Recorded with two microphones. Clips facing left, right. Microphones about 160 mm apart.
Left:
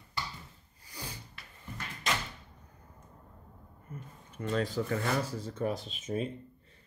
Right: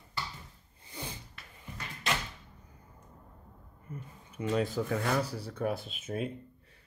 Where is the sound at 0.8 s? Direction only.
25° right (ahead or behind).